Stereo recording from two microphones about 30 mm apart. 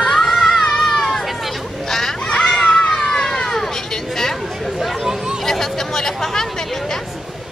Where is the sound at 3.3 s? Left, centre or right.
Left.